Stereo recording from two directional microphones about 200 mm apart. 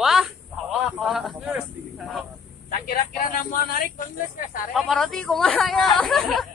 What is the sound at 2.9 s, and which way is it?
Speech, 45° left (ahead or behind).